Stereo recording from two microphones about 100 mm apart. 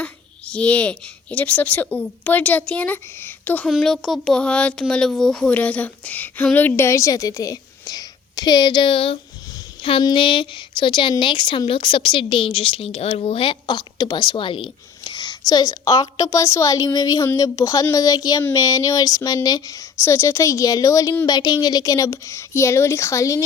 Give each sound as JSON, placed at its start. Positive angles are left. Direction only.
{"t": 0.0, "sound": "speech", "side_deg": 10}
{"t": 3.7, "sound": "speech", "side_deg": 0}